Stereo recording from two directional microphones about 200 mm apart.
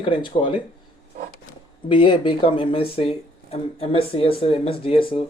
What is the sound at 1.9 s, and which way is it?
Speech, 25° left (ahead or behind).